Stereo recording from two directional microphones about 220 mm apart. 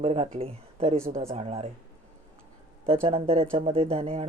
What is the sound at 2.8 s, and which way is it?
Speech, 25° right (ahead or behind).